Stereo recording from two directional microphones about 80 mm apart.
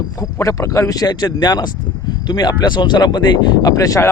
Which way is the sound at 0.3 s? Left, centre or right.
Left.